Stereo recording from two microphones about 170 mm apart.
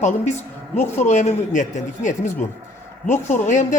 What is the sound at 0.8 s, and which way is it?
Speech, 45° left (ahead or behind).